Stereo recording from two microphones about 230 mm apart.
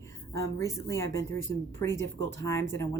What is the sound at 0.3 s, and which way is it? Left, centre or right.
Speech, centre.